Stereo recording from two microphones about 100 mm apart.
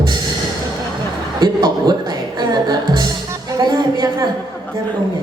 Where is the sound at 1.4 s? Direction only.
50° right (ahead or behind).